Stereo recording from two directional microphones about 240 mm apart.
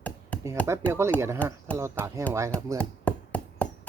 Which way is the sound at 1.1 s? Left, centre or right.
Centre.